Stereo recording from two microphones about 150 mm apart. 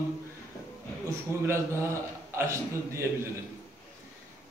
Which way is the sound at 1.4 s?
20° right (ahead or behind).